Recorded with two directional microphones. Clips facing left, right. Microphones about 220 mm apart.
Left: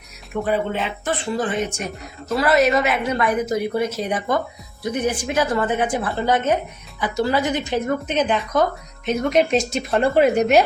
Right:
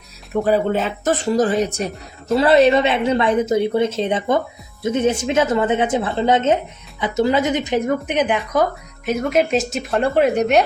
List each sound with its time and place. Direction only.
0.4 s a woman's voice: 40° right (ahead or behind); by 8.4 s 15° right (ahead or behind)
9.0 s speech: 5° right (ahead or behind)